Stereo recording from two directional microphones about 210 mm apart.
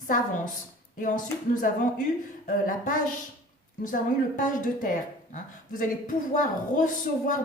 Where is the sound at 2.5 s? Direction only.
40° left (ahead or behind).